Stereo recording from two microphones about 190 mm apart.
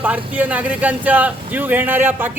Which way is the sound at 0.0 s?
10° right (ahead or behind).